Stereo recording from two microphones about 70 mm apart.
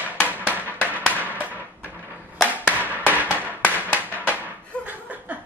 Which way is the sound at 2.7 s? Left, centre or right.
Right.